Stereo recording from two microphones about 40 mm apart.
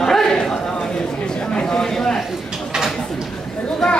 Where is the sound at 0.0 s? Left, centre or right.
Centre.